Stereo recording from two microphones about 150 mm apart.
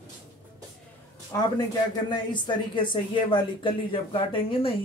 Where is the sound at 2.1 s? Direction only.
30° left (ahead or behind).